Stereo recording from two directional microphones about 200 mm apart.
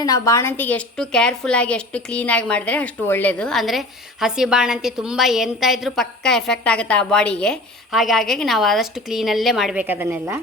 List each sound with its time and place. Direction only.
0.0 s a woman's voice: 15° left (ahead or behind); by 10.4 s 10° right (ahead or behind)